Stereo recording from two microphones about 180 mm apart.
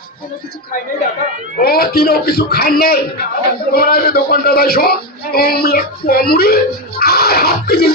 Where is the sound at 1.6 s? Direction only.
55° left (ahead or behind).